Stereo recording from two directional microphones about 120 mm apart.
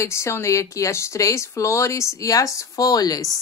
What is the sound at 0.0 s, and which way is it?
Speech, 20° left (ahead or behind).